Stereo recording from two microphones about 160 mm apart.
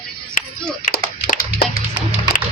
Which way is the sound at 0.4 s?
55° left (ahead or behind).